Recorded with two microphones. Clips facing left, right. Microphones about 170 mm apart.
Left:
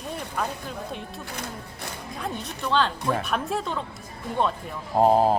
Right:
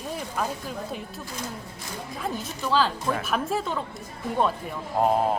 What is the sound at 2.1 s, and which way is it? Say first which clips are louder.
Speech: right 1 dB; centre (ahead or behind).